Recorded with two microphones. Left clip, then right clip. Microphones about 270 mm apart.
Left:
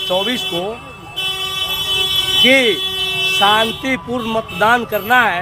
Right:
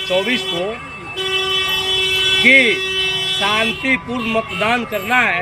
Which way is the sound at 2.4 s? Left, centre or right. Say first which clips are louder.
Even; centre.